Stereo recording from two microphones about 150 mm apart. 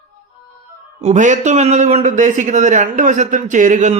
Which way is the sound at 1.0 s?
55° right (ahead or behind).